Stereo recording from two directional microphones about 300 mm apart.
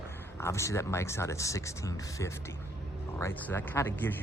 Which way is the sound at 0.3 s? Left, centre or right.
Centre.